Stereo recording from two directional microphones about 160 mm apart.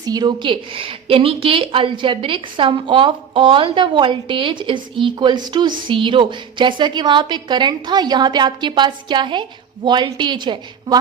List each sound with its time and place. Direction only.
0.0 s a woman's voice: 25° right (ahead or behind)